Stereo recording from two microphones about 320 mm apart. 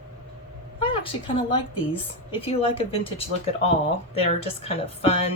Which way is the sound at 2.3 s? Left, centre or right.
Centre.